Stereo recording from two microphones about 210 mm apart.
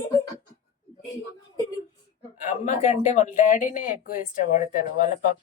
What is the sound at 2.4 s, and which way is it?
Speech, 35° left (ahead or behind).